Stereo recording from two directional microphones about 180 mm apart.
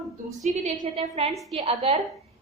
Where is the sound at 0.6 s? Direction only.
35° right (ahead or behind).